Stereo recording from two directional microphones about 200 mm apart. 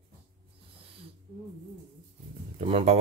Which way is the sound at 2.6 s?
30° right (ahead or behind).